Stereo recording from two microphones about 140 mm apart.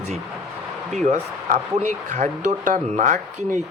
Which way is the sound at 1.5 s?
60° right (ahead or behind).